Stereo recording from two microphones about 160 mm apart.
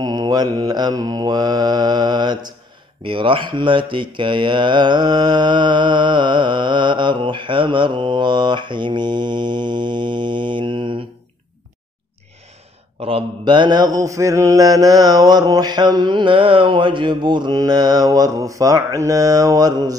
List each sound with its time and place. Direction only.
0.0 s speech: 25° right (ahead or behind)
13.0 s speech: 30° right (ahead or behind)